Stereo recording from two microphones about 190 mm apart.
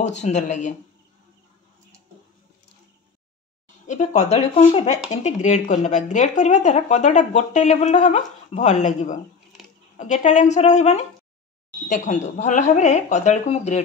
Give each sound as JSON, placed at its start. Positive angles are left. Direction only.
{"t": 0.0, "sound": "speech", "side_deg": 35}
{"t": 3.8, "sound": "speech", "side_deg": 40}